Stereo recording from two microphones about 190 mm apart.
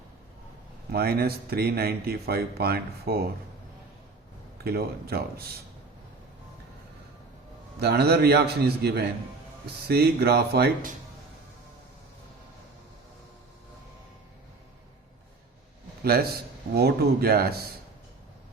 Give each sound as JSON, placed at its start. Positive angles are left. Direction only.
{"t": 0.9, "sound": "speech", "side_deg": -55}
{"t": 4.5, "sound": "speech", "side_deg": -55}
{"t": 7.8, "sound": "speech", "side_deg": -60}
{"t": 16.0, "sound": "speech", "side_deg": -55}